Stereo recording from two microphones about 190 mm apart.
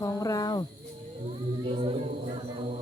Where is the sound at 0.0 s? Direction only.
15° left (ahead or behind).